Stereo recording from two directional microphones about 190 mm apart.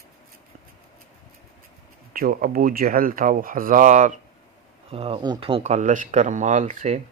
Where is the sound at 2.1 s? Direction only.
50° right (ahead or behind).